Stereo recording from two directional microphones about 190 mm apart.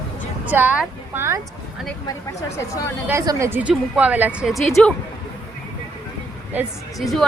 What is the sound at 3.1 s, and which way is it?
A woman's voice, 15° right (ahead or behind).